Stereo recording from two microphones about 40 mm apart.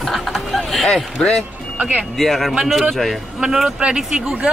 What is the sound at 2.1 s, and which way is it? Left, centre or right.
Speech, centre.